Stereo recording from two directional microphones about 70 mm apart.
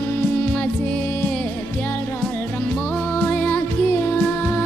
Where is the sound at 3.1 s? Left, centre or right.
Centre.